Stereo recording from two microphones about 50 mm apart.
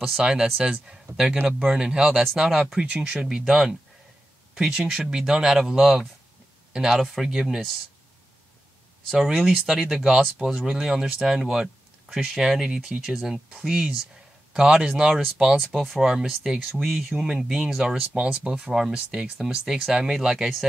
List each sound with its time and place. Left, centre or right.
0.2 s speech: centre
9.1 s speech: centre
15.5 s speech: centre
18.1 s speech: centre